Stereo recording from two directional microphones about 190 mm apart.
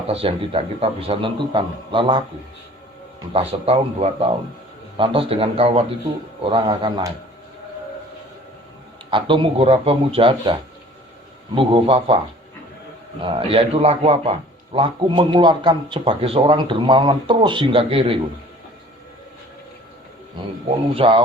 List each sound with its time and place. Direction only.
0.1 s a man's voice: 30° right (ahead or behind)
3.3 s a man's voice: 30° right (ahead or behind)
9.0 s a man's voice: 25° right (ahead or behind)
13.2 s a man's voice: 30° right (ahead or behind)
20.9 s a man's voice: 30° right (ahead or behind)